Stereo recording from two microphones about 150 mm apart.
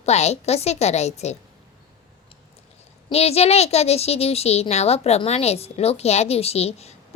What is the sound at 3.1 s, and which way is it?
A woman's voice, 45° left (ahead or behind).